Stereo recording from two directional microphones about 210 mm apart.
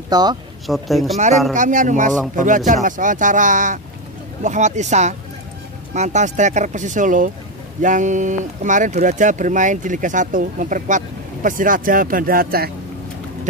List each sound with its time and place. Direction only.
0.1 s speech: 20° right (ahead or behind)
0.7 s speech: centre (ahead or behind)
1.5 s speech: 35° right (ahead or behind)